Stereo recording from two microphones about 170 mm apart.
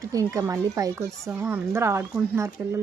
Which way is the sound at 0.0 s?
20° right (ahead or behind).